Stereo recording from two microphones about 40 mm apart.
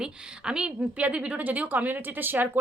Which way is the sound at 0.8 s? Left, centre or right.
Right.